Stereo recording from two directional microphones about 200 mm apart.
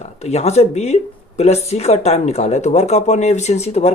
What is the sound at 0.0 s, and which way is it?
A woman's voice, 35° left (ahead or behind).